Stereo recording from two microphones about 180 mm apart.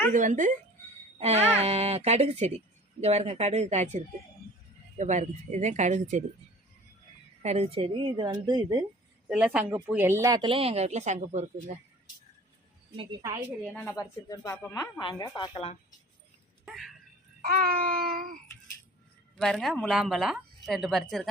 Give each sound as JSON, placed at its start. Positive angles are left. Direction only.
{"t": 0.1, "sound": "a sound", "side_deg": -45}
{"t": 1.2, "sound": "speech", "side_deg": -35}
{"t": 7.4, "sound": "speech", "side_deg": -35}
{"t": 9.3, "sound": "speech", "side_deg": -5}
{"t": 13.0, "sound": "speech", "side_deg": -25}
{"t": 13.7, "sound": "speech", "side_deg": 15}
{"t": 16.6, "sound": "shatter", "side_deg": 0}
{"t": 17.6, "sound": "a sound", "side_deg": -55}
{"t": 19.4, "sound": "speech", "side_deg": 0}